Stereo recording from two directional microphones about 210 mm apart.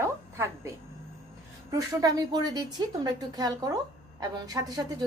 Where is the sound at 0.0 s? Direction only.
10° right (ahead or behind).